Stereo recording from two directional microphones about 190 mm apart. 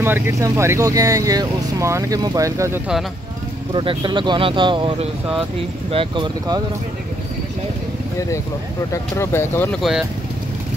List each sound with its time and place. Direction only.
0.0 s speech: 10° right (ahead or behind)
3.7 s speech: 25° right (ahead or behind)
8.9 s speech: 15° left (ahead or behind)
9.8 s speech: centre (ahead or behind)